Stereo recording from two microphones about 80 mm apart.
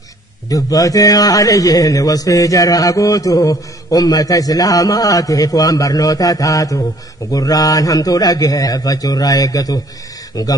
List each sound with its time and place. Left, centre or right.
0.5 s a man's voice: left